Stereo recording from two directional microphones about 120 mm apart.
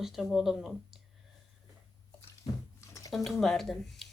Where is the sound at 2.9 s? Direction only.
25° left (ahead or behind).